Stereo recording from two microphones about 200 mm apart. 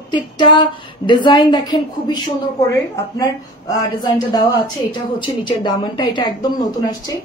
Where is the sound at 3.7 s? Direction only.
20° left (ahead or behind).